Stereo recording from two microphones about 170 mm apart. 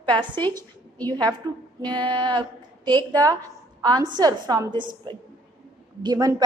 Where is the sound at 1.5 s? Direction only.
20° right (ahead or behind).